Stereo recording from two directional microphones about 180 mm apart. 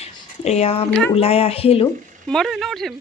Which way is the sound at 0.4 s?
35° left (ahead or behind).